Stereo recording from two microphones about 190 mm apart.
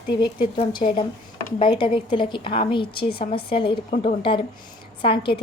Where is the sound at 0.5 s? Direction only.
25° left (ahead or behind).